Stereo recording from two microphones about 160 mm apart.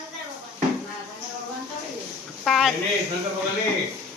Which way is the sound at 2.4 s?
Centre (ahead or behind).